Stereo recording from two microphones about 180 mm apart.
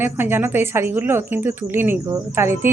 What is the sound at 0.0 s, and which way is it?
A woman's voice, 10° right (ahead or behind).